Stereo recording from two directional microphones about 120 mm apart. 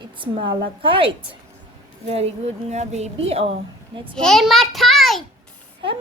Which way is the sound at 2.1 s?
60° right (ahead or behind).